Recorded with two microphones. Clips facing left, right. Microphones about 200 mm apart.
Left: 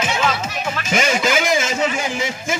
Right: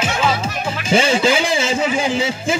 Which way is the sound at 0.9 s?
30° right (ahead or behind).